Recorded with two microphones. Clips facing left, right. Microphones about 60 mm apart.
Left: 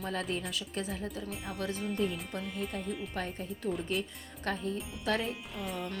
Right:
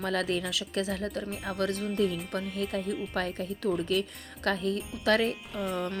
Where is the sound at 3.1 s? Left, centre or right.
Right.